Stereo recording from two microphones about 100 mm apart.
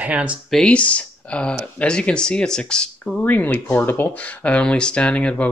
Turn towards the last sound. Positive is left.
turn(degrees=10)  # may be behind; listen again after turning